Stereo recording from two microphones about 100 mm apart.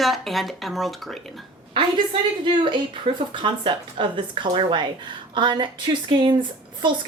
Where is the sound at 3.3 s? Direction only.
55° right (ahead or behind).